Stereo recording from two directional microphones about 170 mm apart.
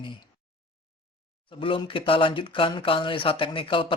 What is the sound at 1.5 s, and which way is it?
Speech, 30° left (ahead or behind).